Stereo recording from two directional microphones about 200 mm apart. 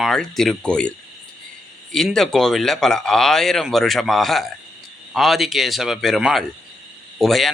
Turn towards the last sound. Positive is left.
turn(degrees=0)  # may be behind; listen again after turning